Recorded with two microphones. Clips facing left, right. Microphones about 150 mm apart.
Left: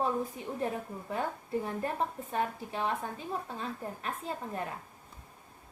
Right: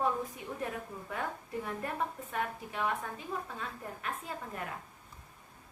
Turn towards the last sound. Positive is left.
turn(degrees=30)  # may be behind; listen again after turning